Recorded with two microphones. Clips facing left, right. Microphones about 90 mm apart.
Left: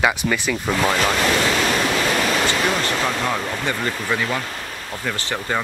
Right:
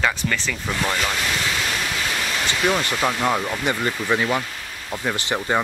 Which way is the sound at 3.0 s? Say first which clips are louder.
Right 1 dB; 10° right (ahead or behind).